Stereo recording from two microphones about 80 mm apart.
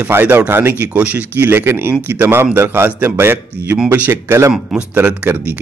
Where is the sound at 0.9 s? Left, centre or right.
Centre.